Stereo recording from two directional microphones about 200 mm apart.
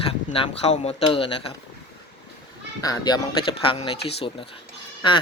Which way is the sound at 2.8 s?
20° left (ahead or behind).